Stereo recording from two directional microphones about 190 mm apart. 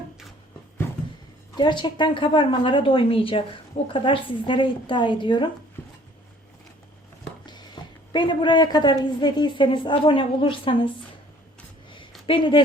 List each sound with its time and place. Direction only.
1.5 s a woman's voice: 25° left (ahead or behind)
7.4 s a sound: 20° left (ahead or behind)
8.1 s a woman's voice: 25° left (ahead or behind)
12.2 s speech: 25° left (ahead or behind)